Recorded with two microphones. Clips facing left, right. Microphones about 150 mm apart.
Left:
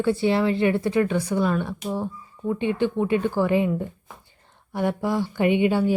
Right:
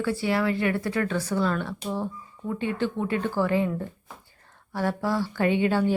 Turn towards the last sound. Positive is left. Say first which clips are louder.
# left 3 dB
turn(degrees=15)  # may be behind; listen again after turning